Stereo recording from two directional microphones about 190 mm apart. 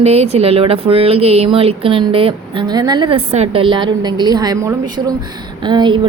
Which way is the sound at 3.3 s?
35° right (ahead or behind).